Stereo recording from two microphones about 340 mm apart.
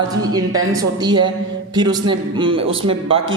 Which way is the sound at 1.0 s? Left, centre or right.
Centre.